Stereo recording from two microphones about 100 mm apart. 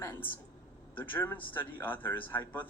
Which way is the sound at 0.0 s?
20° left (ahead or behind).